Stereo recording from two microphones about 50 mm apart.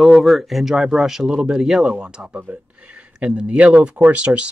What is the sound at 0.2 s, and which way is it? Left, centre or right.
Speech, centre.